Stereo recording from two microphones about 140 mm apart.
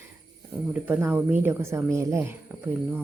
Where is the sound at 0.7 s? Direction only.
10° right (ahead or behind).